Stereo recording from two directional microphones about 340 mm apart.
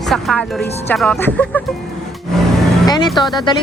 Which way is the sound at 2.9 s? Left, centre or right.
Centre.